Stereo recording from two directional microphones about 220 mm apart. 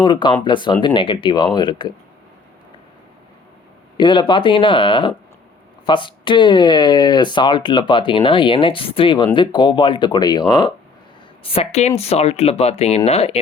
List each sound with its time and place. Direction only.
0.0 s speech: 20° left (ahead or behind)
3.9 s speech: 20° left (ahead or behind)